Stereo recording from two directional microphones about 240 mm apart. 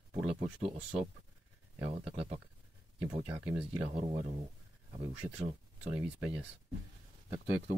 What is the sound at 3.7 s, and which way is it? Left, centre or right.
Speech, right.